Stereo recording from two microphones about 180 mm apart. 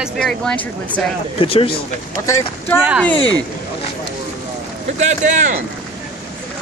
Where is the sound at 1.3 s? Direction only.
30° left (ahead or behind).